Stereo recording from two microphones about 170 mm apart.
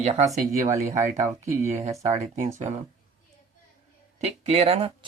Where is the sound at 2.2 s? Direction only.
45° right (ahead or behind).